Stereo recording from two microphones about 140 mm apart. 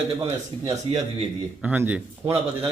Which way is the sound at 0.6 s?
35° right (ahead or behind).